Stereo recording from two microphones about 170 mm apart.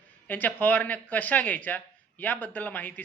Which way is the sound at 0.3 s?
10° left (ahead or behind).